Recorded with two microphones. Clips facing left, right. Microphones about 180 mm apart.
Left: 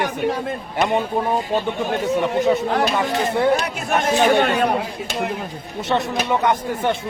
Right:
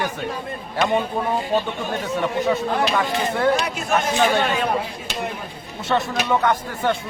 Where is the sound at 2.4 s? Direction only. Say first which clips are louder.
Left 2 dB; 20° left (ahead or behind).